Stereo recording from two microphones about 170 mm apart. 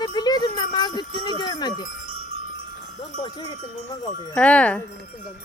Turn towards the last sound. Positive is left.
turn(degrees=5)  # may be behind; listen again after turning